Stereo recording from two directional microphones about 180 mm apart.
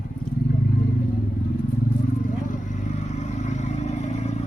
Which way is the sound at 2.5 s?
40° left (ahead or behind).